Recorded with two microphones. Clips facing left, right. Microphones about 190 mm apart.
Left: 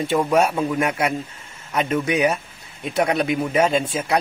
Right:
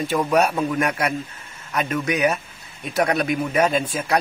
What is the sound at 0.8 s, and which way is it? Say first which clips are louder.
Speech: left 1 dB; 20° left (ahead or behind).